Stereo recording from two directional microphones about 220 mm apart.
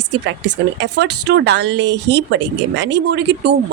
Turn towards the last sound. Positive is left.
turn(degrees=-50)  # may be behind; listen again after turning